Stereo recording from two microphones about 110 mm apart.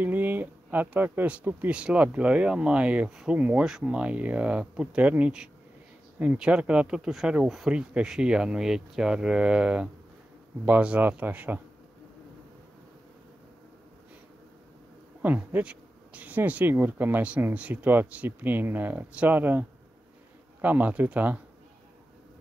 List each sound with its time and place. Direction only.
0.0 s speech: 15° right (ahead or behind)
15.2 s speech: 15° right (ahead or behind)
20.6 s speech: 15° right (ahead or behind)